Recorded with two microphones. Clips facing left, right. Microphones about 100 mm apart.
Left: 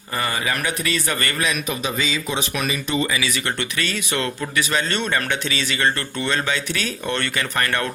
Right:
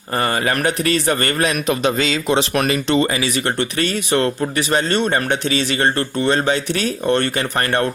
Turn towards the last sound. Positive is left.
turn(degrees=-35)  # may be behind; listen again after turning